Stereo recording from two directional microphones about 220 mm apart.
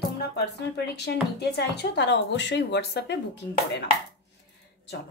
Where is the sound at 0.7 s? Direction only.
50° left (ahead or behind).